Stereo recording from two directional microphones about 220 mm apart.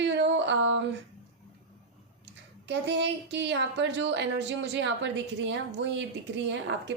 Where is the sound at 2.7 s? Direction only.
50° right (ahead or behind).